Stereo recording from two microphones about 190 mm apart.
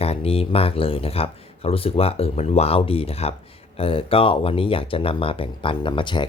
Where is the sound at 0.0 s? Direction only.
30° left (ahead or behind).